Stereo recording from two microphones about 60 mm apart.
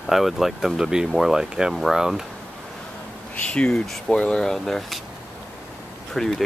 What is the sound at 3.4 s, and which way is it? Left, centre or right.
Speech, centre.